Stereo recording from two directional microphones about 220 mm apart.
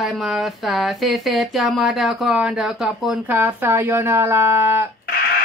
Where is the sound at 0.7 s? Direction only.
Centre (ahead or behind).